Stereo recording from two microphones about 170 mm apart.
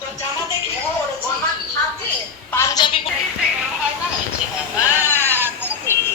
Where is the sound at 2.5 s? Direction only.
20° left (ahead or behind).